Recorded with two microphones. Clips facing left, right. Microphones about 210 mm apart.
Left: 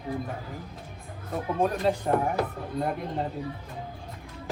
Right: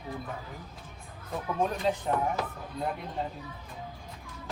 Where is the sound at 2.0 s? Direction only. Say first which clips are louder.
Left 4 dB; 50° left (ahead or behind).